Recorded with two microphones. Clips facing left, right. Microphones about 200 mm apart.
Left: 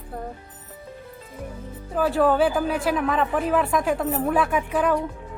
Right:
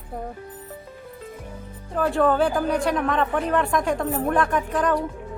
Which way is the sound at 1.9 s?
5° left (ahead or behind).